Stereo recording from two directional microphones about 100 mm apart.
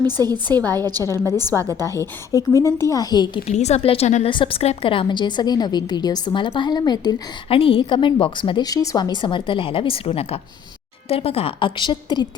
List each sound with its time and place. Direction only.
0.0 s a woman's voice: 45° right (ahead or behind)
0.6 s a woman's voice: 25° left (ahead or behind)
1.7 s a woman's voice: 35° right (ahead or behind)
2.0 s a woman's voice: 35° left (ahead or behind)
3.4 s a woman's voice: 90° left
4.3 s a woman's voice: 55° left (ahead or behind)
4.6 s a woman's voice: 80° left; by 7.2 s 45° left (ahead or behind)
7.5 s a woman's voice: 65° left (ahead or behind); by 9.0 s 35° left (ahead or behind)
9.0 s a woman's voice: 55° left (ahead or behind)